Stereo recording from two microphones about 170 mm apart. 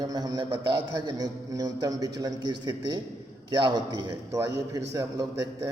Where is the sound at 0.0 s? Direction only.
20° right (ahead or behind).